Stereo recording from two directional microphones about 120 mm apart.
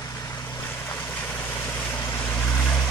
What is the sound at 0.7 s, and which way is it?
Vehicle, 15° left (ahead or behind).